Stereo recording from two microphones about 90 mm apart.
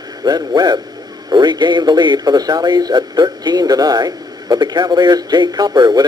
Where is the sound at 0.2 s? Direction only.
50° right (ahead or behind).